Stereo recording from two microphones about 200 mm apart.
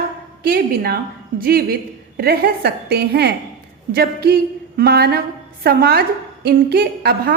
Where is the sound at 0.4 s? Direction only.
50° right (ahead or behind).